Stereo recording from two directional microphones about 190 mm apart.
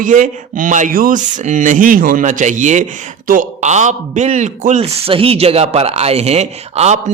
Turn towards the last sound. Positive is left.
turn(degrees=-35)  # may be behind; listen again after turning